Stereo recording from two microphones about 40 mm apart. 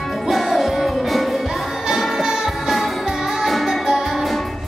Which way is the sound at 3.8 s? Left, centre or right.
Centre.